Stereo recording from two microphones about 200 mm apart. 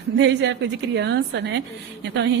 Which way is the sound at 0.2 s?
65° right (ahead or behind).